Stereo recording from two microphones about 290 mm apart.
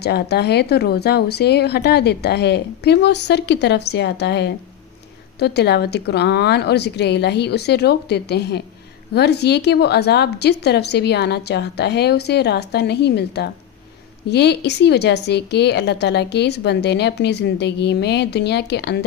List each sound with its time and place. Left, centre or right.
0.0 s a woman's voice: left